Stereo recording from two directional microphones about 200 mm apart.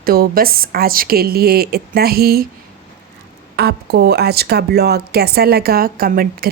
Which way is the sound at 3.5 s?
55° right (ahead or behind).